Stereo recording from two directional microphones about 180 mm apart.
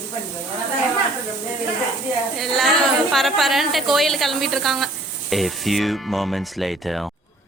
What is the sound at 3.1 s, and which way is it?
Speech, centre (ahead or behind).